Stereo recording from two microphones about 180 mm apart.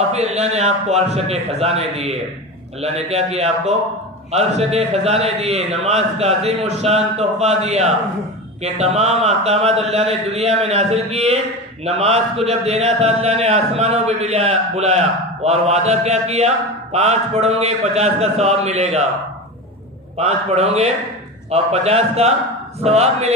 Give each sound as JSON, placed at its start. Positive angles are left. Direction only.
{"t": 0.1, "sound": "a man's voice", "side_deg": -35}
{"t": 20.1, "sound": "a man's voice", "side_deg": -35}